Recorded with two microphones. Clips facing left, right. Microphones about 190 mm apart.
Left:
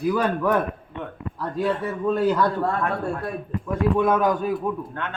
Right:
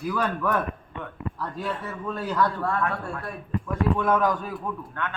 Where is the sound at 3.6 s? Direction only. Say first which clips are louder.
Left 4 dB; 15° left (ahead or behind).